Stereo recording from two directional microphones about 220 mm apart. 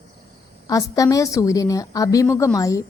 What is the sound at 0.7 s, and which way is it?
A woman's voice, 15° left (ahead or behind).